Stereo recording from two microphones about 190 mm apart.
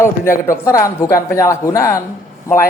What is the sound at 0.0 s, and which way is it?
A man's voice, 15° left (ahead or behind).